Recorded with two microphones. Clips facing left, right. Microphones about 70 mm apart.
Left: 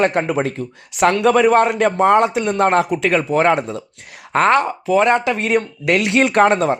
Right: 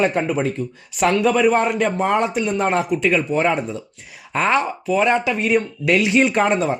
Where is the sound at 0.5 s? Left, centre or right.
Left.